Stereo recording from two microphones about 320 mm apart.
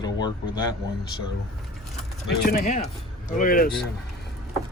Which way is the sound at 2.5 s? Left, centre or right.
Left.